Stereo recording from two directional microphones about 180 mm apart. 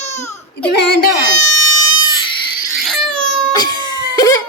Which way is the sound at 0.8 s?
65° left (ahead or behind).